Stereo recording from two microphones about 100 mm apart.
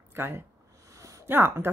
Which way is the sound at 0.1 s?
25° right (ahead or behind).